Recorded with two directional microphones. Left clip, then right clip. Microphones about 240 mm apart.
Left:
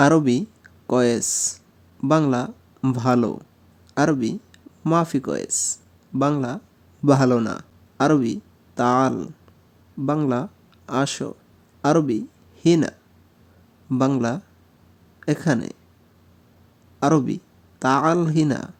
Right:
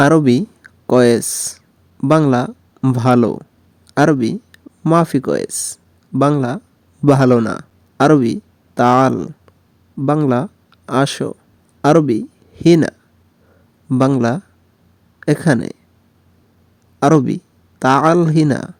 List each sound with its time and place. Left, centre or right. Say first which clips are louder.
0.0 s speech: right 5 dB; right
13.9 s a man's voice: right 7 dB; right
17.0 s speech: right 7 dB; right